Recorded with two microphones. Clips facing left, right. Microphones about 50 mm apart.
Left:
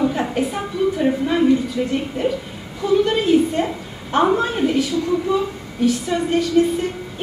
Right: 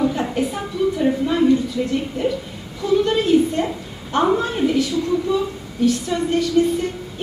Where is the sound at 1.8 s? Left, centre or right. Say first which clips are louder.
Left 1 dB; left.